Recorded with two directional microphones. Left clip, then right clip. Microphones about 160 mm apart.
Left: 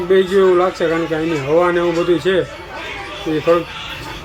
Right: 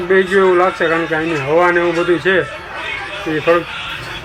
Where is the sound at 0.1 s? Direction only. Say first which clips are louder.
Right 1 dB; 15° left (ahead or behind).